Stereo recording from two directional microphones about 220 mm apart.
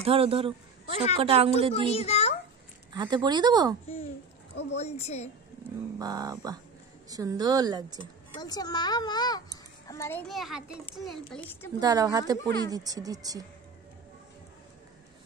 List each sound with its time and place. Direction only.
0.0 s speech: 25° right (ahead or behind)
1.9 s a child's voice: 30° left (ahead or behind)
2.9 s speech: 20° right (ahead or behind)
4.7 s a child's voice: 30° left (ahead or behind)
5.9 s a woman's voice: 15° right (ahead or behind)
8.4 s a child's voice: 15° left (ahead or behind)
11.8 s a woman's voice: 15° right (ahead or behind)
12.4 s speech: 15° left (ahead or behind)
12.7 s a woman's voice: 15° right (ahead or behind)